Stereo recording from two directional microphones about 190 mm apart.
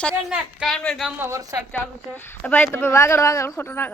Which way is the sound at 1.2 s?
15° right (ahead or behind).